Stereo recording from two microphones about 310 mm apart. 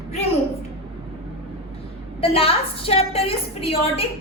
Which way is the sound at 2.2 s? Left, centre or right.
Centre.